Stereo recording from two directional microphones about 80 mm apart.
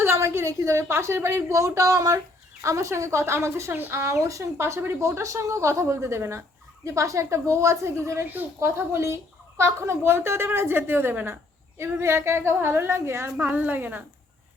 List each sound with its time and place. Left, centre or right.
0.0 s a woman's voice: right
13.3 s a woman's voice: centre